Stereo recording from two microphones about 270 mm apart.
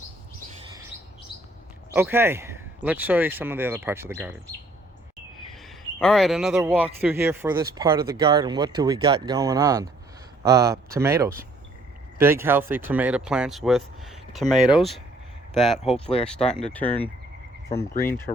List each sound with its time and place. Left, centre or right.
0.7 s chirp: centre
1.9 s a man's voice: centre
5.5 s a man's voice: centre
16.0 s speech: left
16.6 s speech: centre